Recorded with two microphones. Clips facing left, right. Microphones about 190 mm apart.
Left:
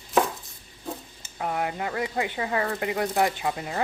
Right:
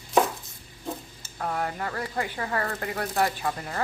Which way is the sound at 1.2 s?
15° left (ahead or behind).